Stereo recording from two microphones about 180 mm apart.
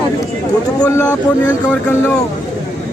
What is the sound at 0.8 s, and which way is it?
A man's voice, 10° left (ahead or behind).